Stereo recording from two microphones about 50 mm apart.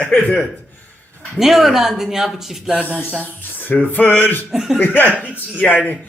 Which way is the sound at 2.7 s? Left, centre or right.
Right.